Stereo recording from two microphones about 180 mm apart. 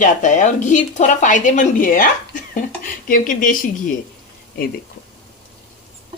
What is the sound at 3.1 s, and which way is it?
Speech, 50° left (ahead or behind).